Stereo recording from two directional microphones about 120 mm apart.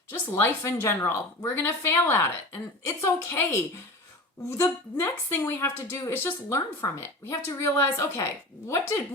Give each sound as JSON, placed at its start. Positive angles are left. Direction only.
{"t": 0.1, "sound": "a woman's voice", "side_deg": 25}